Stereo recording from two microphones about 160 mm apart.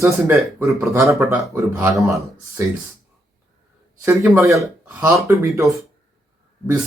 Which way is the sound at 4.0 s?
15° right (ahead or behind).